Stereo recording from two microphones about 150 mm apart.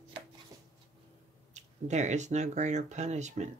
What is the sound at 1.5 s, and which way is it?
Speech, 50° right (ahead or behind).